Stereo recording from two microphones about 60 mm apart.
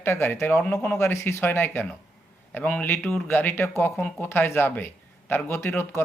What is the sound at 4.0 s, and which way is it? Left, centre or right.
Speech, left.